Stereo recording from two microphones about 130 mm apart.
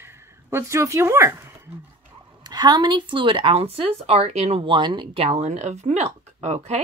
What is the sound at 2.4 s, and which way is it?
Speech, 30° right (ahead or behind).